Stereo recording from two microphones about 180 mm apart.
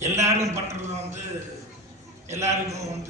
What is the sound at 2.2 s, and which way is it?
Speech, 15° right (ahead or behind).